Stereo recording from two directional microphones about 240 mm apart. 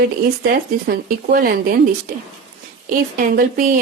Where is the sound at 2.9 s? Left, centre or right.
Right.